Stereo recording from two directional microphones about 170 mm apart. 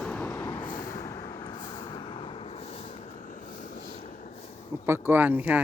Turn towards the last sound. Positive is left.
turn(degrees=-10)  # may be behind; listen again after turning